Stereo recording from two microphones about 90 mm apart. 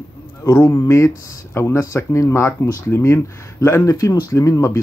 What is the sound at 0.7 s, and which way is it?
Speech, 30° left (ahead or behind).